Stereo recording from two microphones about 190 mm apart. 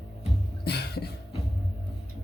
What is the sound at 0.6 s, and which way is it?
Music, 55° left (ahead or behind).